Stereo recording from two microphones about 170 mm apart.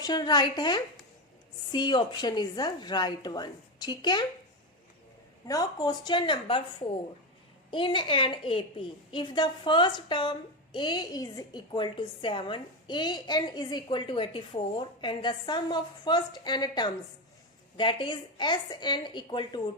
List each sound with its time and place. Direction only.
0.0 s a woman's voice: 25° left (ahead or behind)
5.5 s a woman's voice: 20° left (ahead or behind)